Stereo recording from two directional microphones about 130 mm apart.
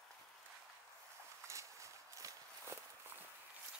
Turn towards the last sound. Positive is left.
turn(degrees=-20)  # may be behind; listen again after turning